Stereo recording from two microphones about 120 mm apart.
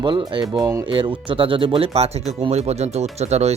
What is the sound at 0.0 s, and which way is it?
Speech, 40° right (ahead or behind).